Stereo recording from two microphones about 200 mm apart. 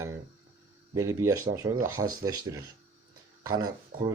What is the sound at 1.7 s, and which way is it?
Speech, 90° right.